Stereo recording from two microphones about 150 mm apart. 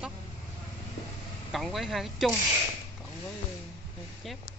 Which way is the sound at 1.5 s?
Centre (ahead or behind).